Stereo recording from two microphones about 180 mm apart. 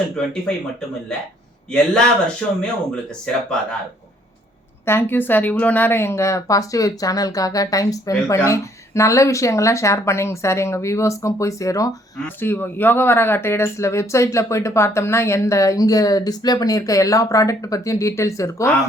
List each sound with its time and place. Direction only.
1.7 s a man's voice: 5° left (ahead or behind)
4.9 s speech: 10° left (ahead or behind)